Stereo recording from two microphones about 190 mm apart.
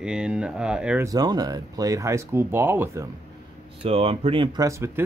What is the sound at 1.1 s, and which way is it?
Speech, 20° right (ahead or behind).